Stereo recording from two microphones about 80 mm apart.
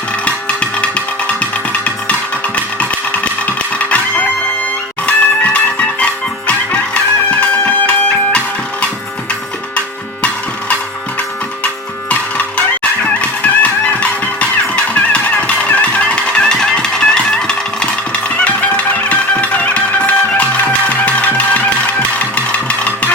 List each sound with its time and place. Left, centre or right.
0.4 s music: centre
3.4 s music: centre
13.6 s music: centre